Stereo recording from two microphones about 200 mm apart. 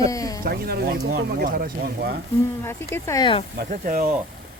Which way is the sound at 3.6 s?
45° right (ahead or behind).